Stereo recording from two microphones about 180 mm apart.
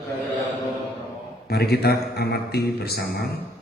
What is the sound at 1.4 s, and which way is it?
Speech, 60° left (ahead or behind).